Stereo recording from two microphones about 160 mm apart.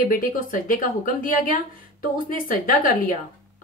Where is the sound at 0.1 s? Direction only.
60° left (ahead or behind).